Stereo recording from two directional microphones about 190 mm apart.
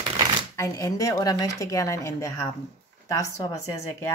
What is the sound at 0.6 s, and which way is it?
Speech, 15° left (ahead or behind).